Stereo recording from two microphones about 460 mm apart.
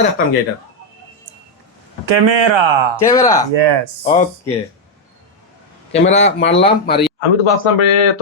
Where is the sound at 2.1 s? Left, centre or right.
Right.